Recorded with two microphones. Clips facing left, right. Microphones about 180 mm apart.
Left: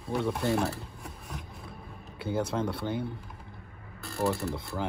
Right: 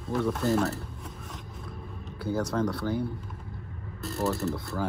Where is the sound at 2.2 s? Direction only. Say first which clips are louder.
Right 2 dB; 25° left (ahead or behind).